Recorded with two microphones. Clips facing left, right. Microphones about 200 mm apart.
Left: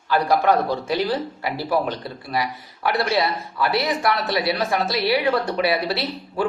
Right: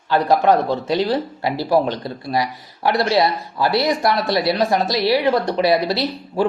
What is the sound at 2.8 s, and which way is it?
Speech, 30° right (ahead or behind).